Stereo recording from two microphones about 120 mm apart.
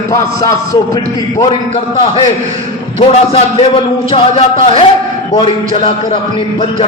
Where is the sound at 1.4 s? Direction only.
60° left (ahead or behind).